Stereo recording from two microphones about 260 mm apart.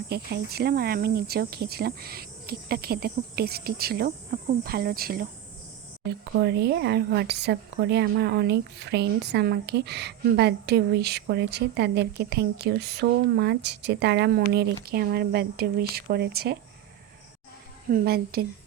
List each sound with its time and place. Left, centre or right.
0.1 s speech: right
17.8 s speech: right